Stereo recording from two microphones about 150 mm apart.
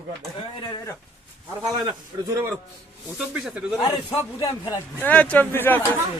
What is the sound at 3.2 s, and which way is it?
Speech, centre (ahead or behind).